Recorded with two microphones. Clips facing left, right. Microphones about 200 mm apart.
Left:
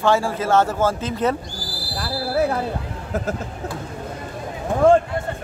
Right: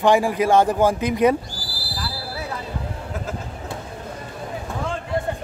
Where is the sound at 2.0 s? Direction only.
50° left (ahead or behind).